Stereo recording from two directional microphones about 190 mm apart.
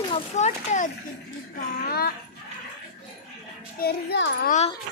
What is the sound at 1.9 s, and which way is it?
Speech, 55° left (ahead or behind).